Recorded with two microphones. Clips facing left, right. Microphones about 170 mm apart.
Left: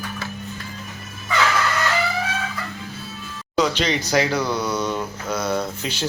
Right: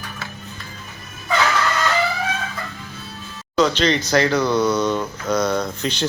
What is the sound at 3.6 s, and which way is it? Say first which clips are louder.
Speech: right 3 dB; 10° left (ahead or behind).